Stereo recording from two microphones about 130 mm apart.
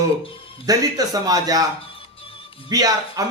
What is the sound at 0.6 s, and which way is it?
A man's voice, 30° right (ahead or behind).